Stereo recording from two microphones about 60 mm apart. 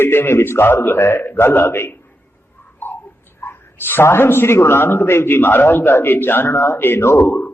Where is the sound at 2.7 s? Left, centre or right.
Left.